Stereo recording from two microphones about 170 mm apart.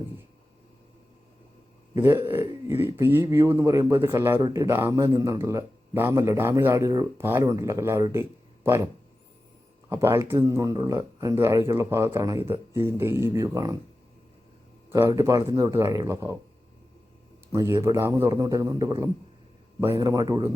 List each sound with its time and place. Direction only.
2.0 s speech: 15° right (ahead or behind)
9.9 s speech: 15° right (ahead or behind)
14.8 s speech: 15° right (ahead or behind)
17.5 s speech: 15° right (ahead or behind)